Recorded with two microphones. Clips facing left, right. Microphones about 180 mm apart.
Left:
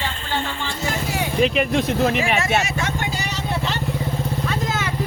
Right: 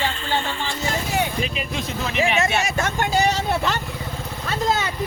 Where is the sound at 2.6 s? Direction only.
45° right (ahead or behind).